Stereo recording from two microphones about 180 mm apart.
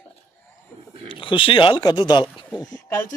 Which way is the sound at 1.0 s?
30° left (ahead or behind).